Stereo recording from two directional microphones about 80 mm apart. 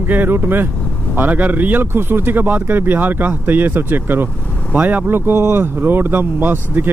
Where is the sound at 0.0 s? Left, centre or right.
Right.